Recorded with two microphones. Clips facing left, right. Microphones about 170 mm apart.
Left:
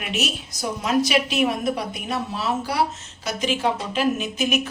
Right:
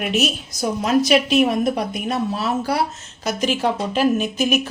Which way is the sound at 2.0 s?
45° right (ahead or behind).